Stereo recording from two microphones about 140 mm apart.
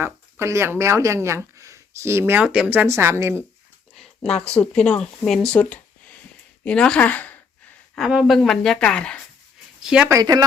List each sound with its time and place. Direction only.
0.0 s speech: 20° right (ahead or behind)
3.9 s a sound: 5° left (ahead or behind)
4.5 s speech: 10° left (ahead or behind)
7.9 s speech: centre (ahead or behind)
9.8 s speech: 5° right (ahead or behind)
10.1 s speech: 25° right (ahead or behind)